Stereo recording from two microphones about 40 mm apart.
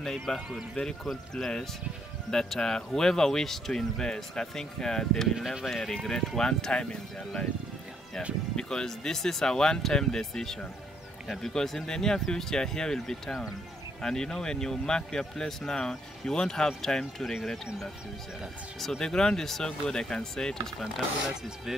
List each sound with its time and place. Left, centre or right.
0.0 s speech: centre
5.3 s speech: centre
5.7 s speech: centre
8.5 s speech: centre
18.8 s speech: centre